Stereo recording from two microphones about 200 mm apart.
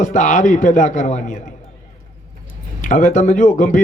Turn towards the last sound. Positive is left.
turn(degrees=40)  # may be behind; listen again after turning